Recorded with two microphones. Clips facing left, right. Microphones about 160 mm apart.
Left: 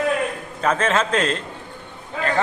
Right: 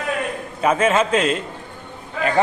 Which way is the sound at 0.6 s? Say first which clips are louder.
Right 3 dB; 10° right (ahead or behind).